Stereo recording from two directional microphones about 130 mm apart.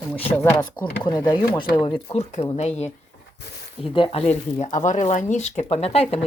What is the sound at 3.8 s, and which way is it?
Speech, 40° left (ahead or behind).